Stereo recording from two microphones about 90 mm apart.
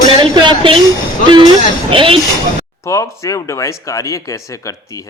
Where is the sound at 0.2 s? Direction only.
60° right (ahead or behind).